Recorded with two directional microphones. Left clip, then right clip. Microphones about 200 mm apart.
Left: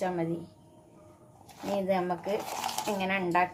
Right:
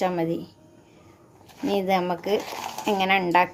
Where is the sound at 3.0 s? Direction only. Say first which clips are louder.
Right 8 dB; 50° right (ahead or behind).